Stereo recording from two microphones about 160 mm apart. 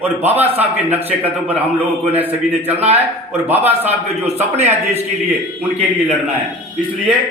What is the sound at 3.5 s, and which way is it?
Speech, 10° right (ahead or behind).